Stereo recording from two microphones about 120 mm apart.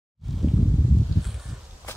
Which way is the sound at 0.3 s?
Centre (ahead or behind).